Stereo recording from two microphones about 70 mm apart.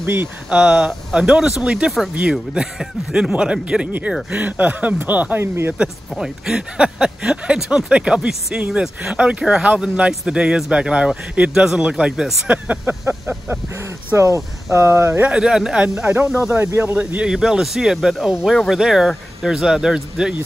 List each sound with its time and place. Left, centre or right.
0.0 s speech: right
0.5 s speech: centre
5.4 s speech: right
5.8 s speech: centre
12.4 s speech: right
13.7 s speech: right
15.2 s speech: centre
16.0 s speech: right
17.3 s speech: centre